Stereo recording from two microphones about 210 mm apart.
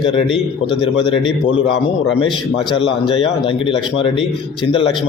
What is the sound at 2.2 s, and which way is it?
A man's voice, 25° left (ahead or behind).